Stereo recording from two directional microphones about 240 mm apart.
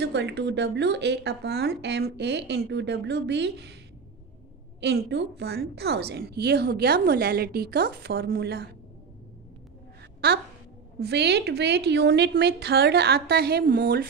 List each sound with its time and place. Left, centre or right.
0.0 s a woman's voice: right
4.7 s a woman's voice: right
10.2 s a woman's voice: right